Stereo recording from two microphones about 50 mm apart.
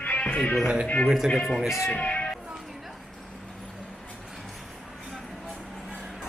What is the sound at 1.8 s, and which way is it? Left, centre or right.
Music, left.